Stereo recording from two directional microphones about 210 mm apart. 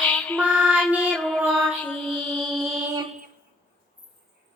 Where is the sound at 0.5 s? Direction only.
5° right (ahead or behind).